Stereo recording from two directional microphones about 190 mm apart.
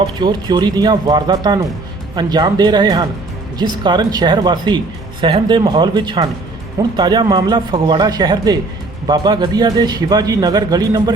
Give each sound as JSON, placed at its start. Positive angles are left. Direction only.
{"t": 0.2, "sound": "speech", "side_deg": -25}